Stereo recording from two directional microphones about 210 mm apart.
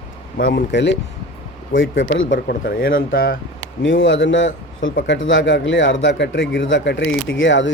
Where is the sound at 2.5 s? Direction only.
45° left (ahead or behind).